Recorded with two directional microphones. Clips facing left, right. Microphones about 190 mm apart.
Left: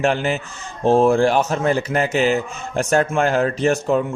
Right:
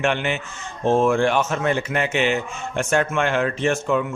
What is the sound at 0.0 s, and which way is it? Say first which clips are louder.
A man's voice: left 3 dB; 35° left (ahead or behind).